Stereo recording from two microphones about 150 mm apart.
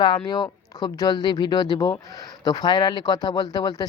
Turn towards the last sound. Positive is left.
turn(degrees=25)  # may be behind; listen again after turning